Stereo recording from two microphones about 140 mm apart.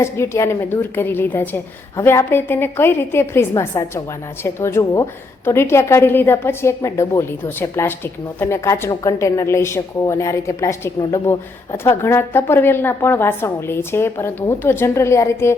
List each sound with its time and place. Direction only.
0.0 s a woman's voice: 20° left (ahead or behind)